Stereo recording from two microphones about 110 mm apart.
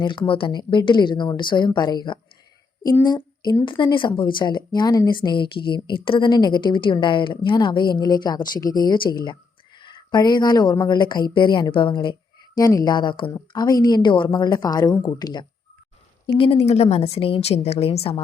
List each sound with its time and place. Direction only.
0.0 s speech: 50° left (ahead or behind)
12.5 s a woman's voice: 35° left (ahead or behind)
16.2 s a woman's voice: 60° left (ahead or behind)